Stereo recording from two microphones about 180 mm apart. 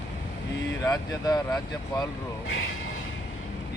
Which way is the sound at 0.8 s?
20° left (ahead or behind).